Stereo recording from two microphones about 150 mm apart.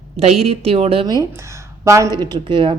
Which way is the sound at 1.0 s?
25° right (ahead or behind).